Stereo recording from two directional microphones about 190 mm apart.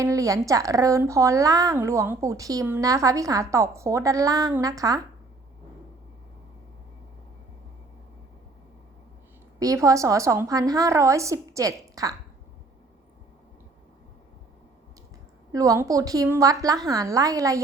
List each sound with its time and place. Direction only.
0.0 s speech: 15° right (ahead or behind)
9.6 s speech: 15° right (ahead or behind)
15.5 s speech: 15° right (ahead or behind)